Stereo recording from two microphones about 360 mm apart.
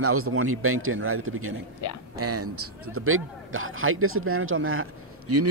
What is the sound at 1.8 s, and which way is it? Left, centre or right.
Speech, left.